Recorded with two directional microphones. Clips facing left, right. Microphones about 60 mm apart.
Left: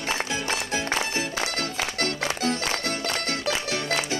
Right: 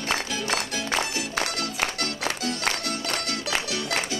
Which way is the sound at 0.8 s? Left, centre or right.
Left.